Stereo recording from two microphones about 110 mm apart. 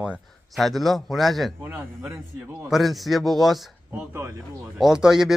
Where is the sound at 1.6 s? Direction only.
20° right (ahead or behind).